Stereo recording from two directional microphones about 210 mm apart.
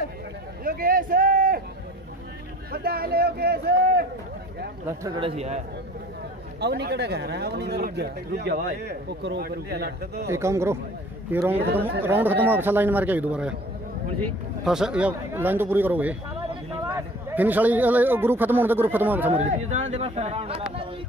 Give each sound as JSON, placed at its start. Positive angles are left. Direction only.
{"t": 0.7, "sound": "speech", "side_deg": -45}
{"t": 2.7, "sound": "speech", "side_deg": -50}
{"t": 4.8, "sound": "speech", "side_deg": -20}
{"t": 6.6, "sound": "speech", "side_deg": -50}
{"t": 10.2, "sound": "a man's voice", "side_deg": -15}
{"t": 14.6, "sound": "a man's voice", "side_deg": -5}
{"t": 17.4, "sound": "a man's voice", "side_deg": -10}
{"t": 19.5, "sound": "speech", "side_deg": -30}